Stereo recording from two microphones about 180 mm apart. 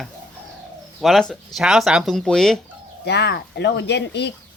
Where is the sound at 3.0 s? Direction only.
70° left (ahead or behind).